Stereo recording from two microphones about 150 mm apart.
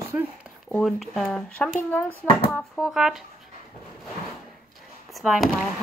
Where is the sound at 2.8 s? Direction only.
Centre (ahead or behind).